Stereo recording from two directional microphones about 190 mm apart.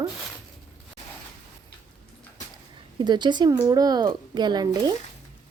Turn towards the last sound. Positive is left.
turn(degrees=-20)  # may be behind; listen again after turning